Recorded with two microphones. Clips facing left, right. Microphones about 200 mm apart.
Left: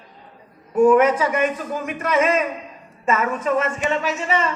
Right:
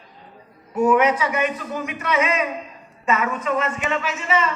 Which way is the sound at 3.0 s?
45° left (ahead or behind).